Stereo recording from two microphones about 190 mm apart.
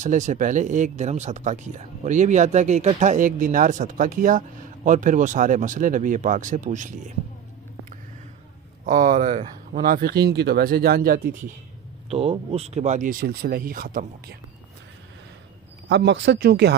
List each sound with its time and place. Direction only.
0.0 s speech: 40° right (ahead or behind)
8.8 s speech: 45° right (ahead or behind)
12.1 s speech: 30° right (ahead or behind); by 14.3 s 50° right (ahead or behind)
15.9 s speech: 70° right (ahead or behind)